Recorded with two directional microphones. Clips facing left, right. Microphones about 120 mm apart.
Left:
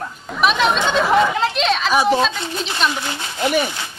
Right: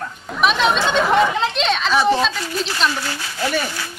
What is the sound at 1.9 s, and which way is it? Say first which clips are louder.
Speech: even; 15° left (ahead or behind).